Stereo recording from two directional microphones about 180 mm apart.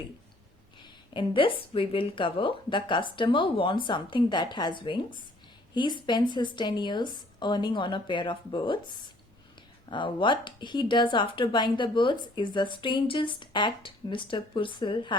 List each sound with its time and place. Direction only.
1.1 s speech: 30° left (ahead or behind)
9.9 s speech: 25° left (ahead or behind)